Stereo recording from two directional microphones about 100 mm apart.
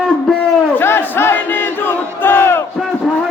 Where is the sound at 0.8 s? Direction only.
25° left (ahead or behind).